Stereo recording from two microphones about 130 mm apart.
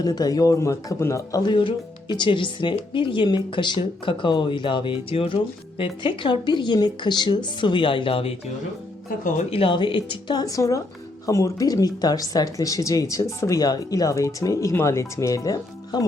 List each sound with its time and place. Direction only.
0.0 s speech: 30° left (ahead or behind)
1.5 s speech: 35° left (ahead or behind)
9.0 s speech: 90° left
9.5 s speech: 45° left (ahead or behind)